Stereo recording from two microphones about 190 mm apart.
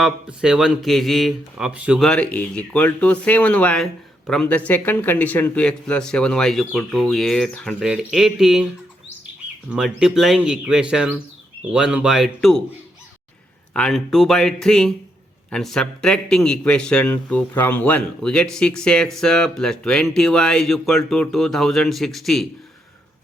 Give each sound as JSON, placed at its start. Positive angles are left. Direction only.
{"t": 0.0, "sound": "a man's voice", "side_deg": -5}
{"t": 9.6, "sound": "a man's voice", "side_deg": -5}
{"t": 13.7, "sound": "a man's voice", "side_deg": 5}